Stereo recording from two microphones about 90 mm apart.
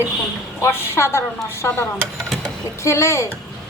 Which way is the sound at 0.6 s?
30° left (ahead or behind).